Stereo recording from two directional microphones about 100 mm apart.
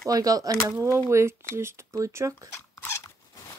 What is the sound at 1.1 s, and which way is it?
Speech, 25° right (ahead or behind).